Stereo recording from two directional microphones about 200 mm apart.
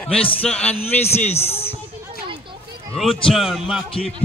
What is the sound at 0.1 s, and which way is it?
Speech, 30° left (ahead or behind).